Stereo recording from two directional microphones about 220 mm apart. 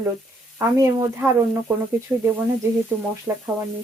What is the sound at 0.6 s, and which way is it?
Speech, 15° right (ahead or behind).